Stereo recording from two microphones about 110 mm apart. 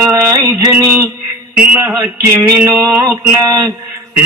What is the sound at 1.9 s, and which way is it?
Mantra, 25° right (ahead or behind).